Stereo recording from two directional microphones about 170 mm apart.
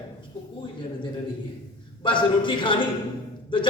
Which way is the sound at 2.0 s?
30° left (ahead or behind).